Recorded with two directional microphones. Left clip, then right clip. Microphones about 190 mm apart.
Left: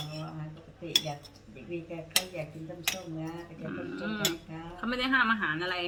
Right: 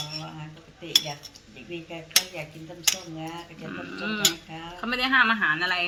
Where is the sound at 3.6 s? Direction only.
15° right (ahead or behind).